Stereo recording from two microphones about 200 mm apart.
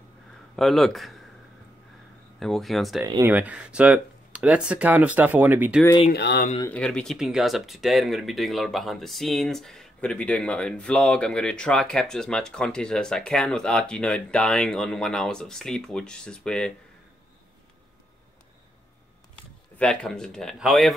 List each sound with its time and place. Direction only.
0.6 s speech: centre (ahead or behind)
2.4 s speech: centre (ahead or behind)
3.1 s speech: 15° right (ahead or behind)
6.1 s speech: 55° left (ahead or behind)
6.6 s speech: 5° left (ahead or behind)
19.8 s speech: 5° left (ahead or behind)